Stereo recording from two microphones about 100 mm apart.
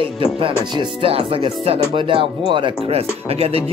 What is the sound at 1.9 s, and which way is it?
Speech, 60° right (ahead or behind).